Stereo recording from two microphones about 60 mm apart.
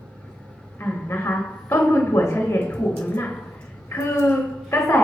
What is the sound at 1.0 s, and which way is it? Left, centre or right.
Speech, left.